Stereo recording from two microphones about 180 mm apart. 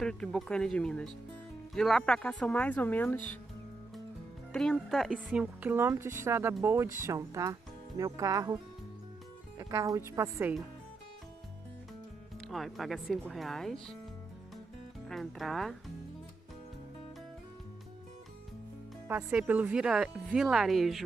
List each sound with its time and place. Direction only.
0.0 s speech: 5° left (ahead or behind)
4.5 s speech: 5° left (ahead or behind); by 8.5 s 20° right (ahead or behind)
9.6 s speech: 20° right (ahead or behind)
12.4 s speech: centre (ahead or behind)
15.0 s speech: centre (ahead or behind)
19.0 s speech: 10° right (ahead or behind)